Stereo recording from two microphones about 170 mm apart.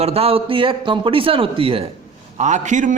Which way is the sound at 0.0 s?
35° right (ahead or behind).